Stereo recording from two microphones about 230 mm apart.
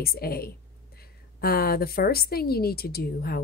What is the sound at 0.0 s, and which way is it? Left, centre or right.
Speech, left.